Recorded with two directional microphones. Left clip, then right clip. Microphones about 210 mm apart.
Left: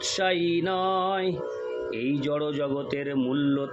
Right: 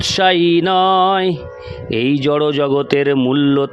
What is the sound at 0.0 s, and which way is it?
Speech, 50° right (ahead or behind).